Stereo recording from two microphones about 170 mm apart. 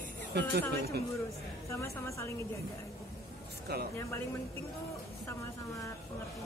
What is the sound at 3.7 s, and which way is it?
Speech, 70° right (ahead or behind).